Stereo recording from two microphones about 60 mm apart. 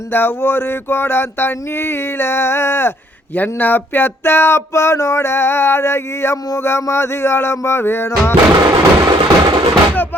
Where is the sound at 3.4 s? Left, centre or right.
Left.